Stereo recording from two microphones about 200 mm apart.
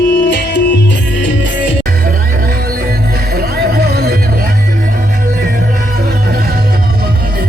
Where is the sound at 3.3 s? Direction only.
50° right (ahead or behind).